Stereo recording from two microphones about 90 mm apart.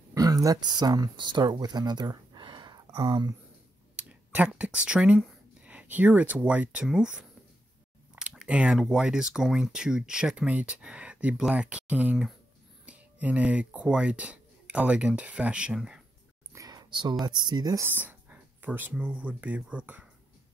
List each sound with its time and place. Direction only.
0.1 s speech: 40° right (ahead or behind)
3.9 s a sound: 15° right (ahead or behind)
4.6 s speech: 10° right (ahead or behind)
8.2 s chewing: 10° right (ahead or behind)
8.7 s speech: 5° right (ahead or behind)
16.5 s a sound: 45° right (ahead or behind)
17.3 s speech: 55° right (ahead or behind)
17.7 s speech: 20° right (ahead or behind)